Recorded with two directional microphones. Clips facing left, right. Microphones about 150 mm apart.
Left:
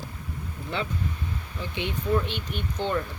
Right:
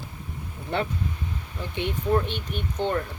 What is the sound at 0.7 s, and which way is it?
Speech, 55° right (ahead or behind).